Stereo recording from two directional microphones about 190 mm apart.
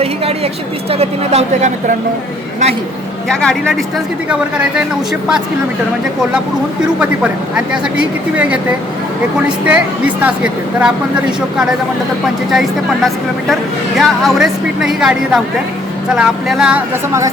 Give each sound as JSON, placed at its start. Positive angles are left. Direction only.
{"t": 0.9, "sound": "speech", "side_deg": -35}
{"t": 3.2, "sound": "a woman's voice", "side_deg": 0}
{"t": 9.6, "sound": "speech", "side_deg": -5}
{"t": 12.5, "sound": "a woman's voice", "side_deg": 0}